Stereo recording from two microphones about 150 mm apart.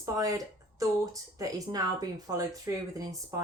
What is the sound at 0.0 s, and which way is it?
Speech, 20° right (ahead or behind).